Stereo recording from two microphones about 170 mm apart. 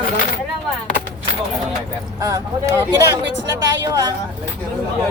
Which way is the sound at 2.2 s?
20° right (ahead or behind).